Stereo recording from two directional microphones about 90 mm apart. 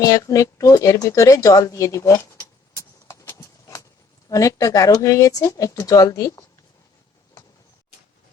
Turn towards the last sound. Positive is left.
turn(degrees=45)  # may be behind; listen again after turning